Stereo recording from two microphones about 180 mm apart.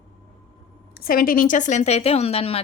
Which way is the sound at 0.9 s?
55° left (ahead or behind).